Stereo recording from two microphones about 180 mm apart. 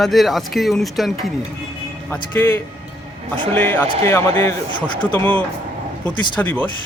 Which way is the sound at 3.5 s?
10° left (ahead or behind).